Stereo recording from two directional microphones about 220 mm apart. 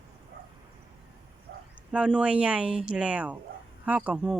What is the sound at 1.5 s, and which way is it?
Bow-wow, 50° right (ahead or behind).